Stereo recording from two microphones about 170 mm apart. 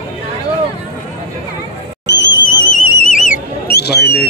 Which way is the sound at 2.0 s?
90° left.